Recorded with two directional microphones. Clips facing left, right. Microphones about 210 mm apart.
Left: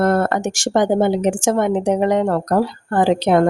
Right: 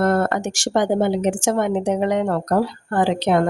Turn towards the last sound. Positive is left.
turn(degrees=45)  # may be behind; listen again after turning